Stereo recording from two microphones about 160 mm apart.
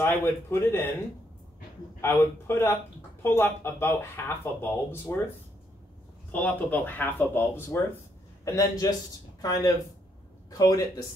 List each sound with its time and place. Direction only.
0.0 s speech: 15° left (ahead or behind)
2.0 s speech: 15° left (ahead or behind)
6.3 s speech: 10° left (ahead or behind)